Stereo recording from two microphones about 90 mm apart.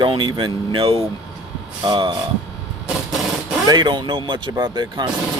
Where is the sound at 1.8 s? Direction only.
55° right (ahead or behind).